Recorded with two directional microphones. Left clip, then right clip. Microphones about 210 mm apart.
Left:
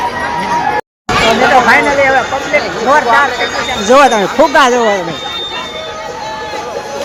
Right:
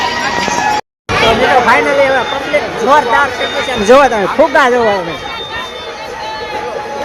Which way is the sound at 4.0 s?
10° left (ahead or behind).